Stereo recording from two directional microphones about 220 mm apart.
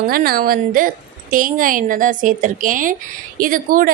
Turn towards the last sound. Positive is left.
turn(degrees=-40)  # may be behind; listen again after turning